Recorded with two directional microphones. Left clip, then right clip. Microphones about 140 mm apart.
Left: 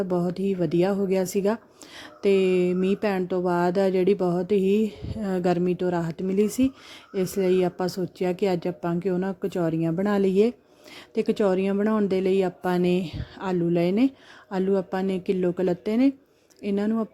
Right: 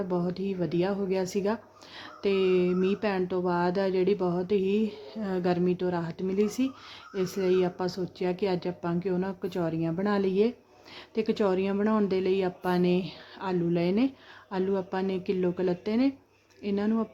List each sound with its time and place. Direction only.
0.1 s speech: 45° left (ahead or behind)